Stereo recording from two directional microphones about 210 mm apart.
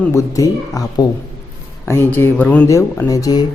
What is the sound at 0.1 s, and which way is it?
A man's voice, 15° left (ahead or behind).